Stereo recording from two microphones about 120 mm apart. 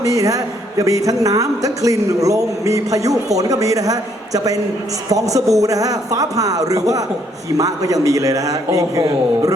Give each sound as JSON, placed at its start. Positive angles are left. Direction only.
{"t": 0.0, "sound": "a man's voice", "side_deg": -30}